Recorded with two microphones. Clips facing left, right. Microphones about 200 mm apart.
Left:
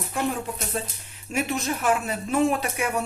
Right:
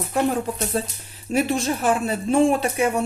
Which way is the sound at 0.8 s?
35° right (ahead or behind).